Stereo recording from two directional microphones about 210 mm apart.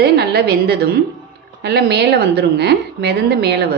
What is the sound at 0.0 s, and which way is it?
A woman's voice, 50° right (ahead or behind).